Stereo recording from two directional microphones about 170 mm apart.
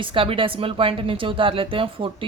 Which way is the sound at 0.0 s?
30° right (ahead or behind).